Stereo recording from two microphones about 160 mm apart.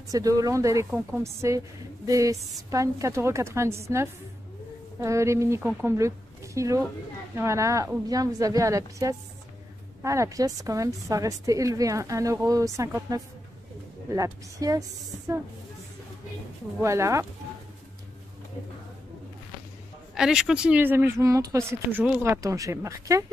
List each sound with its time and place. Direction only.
0.1 s a woman's voice: 20° right (ahead or behind)
5.0 s a woman's voice: 20° right (ahead or behind)
16.8 s speech: 20° right (ahead or behind)
20.2 s speech: 5° right (ahead or behind); by 23.2 s 20° right (ahead or behind)